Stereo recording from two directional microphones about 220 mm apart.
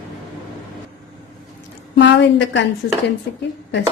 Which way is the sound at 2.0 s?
55° left (ahead or behind).